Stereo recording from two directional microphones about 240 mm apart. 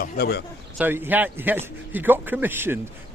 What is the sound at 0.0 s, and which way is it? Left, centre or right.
Speech, left.